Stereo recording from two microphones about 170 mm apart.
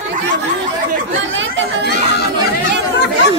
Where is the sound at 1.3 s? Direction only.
90° right.